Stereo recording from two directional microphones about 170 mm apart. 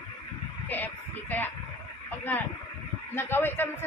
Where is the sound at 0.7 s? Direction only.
10° left (ahead or behind).